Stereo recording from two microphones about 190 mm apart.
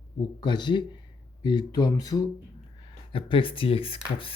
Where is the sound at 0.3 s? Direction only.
25° left (ahead or behind).